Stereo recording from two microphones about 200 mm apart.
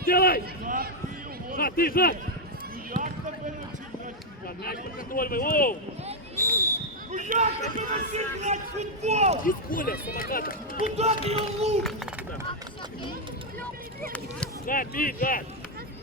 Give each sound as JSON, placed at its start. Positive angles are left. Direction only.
{"t": 0.0, "sound": "a sound", "side_deg": 50}
{"t": 0.6, "sound": "a sound", "side_deg": -40}
{"t": 1.5, "sound": "speech", "side_deg": 45}
{"t": 2.9, "sound": "basketball bounce", "side_deg": -40}
{"t": 4.6, "sound": "speech", "side_deg": 50}
{"t": 6.3, "sound": "basketball bounce", "side_deg": 10}
{"t": 7.1, "sound": "a man's voice", "side_deg": -35}
{"t": 9.4, "sound": "speech", "side_deg": 45}
{"t": 10.9, "sound": "a man's voice", "side_deg": -30}
{"t": 11.8, "sound": "speech", "side_deg": 0}
{"t": 14.7, "sound": "speech", "side_deg": 45}